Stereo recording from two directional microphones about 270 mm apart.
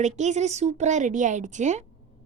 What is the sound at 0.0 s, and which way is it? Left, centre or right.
A woman's voice, right.